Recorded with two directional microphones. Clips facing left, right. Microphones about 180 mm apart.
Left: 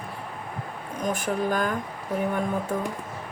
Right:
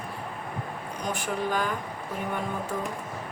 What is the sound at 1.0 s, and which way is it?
Speech, 50° left (ahead or behind).